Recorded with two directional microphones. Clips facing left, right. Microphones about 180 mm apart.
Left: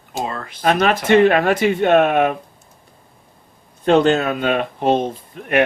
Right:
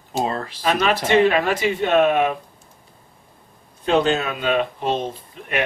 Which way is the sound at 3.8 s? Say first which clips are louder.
Left 5 dB; 50° left (ahead or behind).